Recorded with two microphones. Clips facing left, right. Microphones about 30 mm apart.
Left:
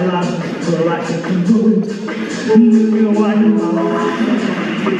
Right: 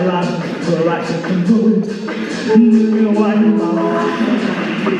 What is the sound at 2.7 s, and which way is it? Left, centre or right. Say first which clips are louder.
Speech: even; right.